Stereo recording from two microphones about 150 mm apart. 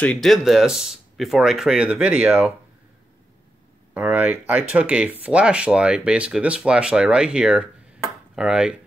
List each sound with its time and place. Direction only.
0.0 s speech: 5° left (ahead or behind)
3.9 s speech: 10° right (ahead or behind)